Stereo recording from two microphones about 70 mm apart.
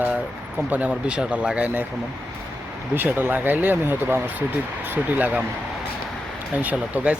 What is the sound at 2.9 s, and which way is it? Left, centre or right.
Speech, right.